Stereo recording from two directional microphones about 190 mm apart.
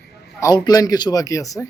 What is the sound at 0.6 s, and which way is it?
Speech, 20° left (ahead or behind).